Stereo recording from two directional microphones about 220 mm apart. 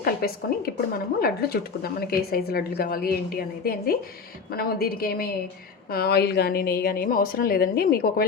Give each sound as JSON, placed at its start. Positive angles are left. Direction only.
{"t": 0.0, "sound": "a woman's voice", "side_deg": 45}